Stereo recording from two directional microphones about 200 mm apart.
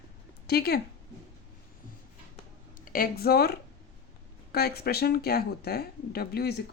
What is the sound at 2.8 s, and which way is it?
Speech, 45° left (ahead or behind).